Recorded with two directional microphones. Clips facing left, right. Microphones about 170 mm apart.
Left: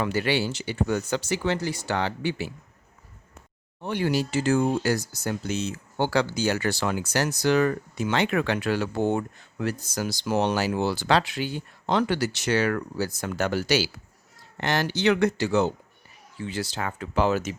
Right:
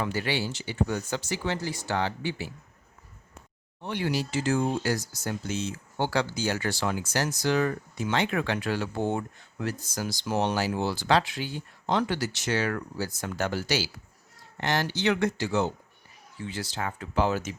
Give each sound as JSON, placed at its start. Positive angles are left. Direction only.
{"t": 0.0, "sound": "speech", "side_deg": 70}
{"t": 3.8, "sound": "speech", "side_deg": 50}